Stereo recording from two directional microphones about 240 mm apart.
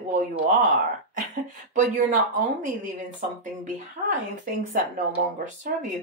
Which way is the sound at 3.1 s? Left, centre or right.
Right.